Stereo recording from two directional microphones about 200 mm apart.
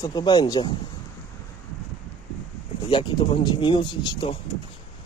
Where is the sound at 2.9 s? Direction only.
25° left (ahead or behind).